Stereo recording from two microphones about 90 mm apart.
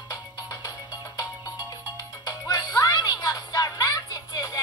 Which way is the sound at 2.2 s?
40° left (ahead or behind).